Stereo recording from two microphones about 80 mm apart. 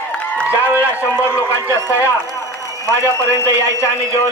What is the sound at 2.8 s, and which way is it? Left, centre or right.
A man's voice, left.